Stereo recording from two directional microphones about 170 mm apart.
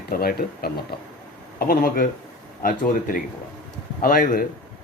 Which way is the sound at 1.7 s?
60° left (ahead or behind).